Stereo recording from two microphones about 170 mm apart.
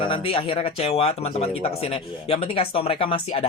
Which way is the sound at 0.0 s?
30° left (ahead or behind).